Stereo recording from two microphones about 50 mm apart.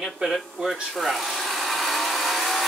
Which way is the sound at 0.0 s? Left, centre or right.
Centre.